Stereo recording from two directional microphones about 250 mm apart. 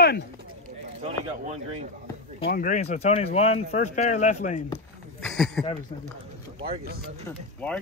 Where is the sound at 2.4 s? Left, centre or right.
Left.